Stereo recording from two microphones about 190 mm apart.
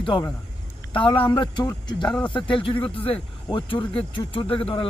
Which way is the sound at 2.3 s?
25° left (ahead or behind).